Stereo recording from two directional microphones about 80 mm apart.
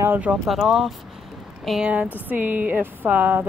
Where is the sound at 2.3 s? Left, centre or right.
Right.